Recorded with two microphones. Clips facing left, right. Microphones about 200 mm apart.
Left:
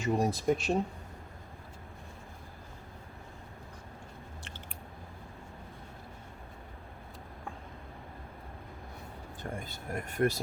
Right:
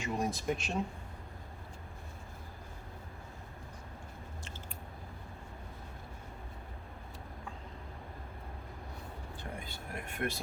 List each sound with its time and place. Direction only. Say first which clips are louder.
0.0 s speech: left 6 dB; 35° left (ahead or behind)
9.4 s speech: left 6 dB; 45° left (ahead or behind)